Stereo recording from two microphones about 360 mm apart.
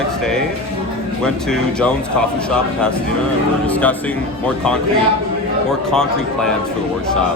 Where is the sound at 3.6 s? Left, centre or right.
Centre.